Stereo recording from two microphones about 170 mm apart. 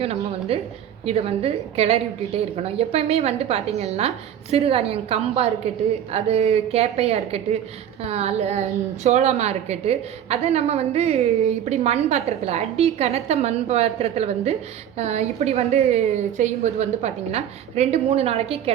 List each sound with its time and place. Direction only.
0.3 s a woman's voice: 35° right (ahead or behind)